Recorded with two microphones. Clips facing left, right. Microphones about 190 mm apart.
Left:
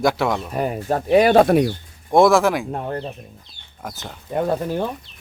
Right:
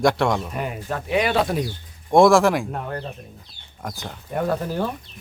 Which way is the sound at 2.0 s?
Centre (ahead or behind).